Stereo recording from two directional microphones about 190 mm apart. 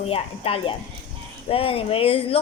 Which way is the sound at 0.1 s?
30° left (ahead or behind).